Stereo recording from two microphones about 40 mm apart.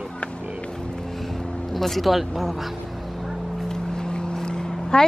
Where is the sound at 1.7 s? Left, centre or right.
Centre.